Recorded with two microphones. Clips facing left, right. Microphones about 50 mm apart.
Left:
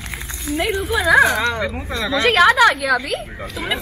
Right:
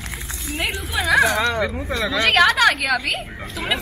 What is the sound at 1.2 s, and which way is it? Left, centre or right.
Speech, left.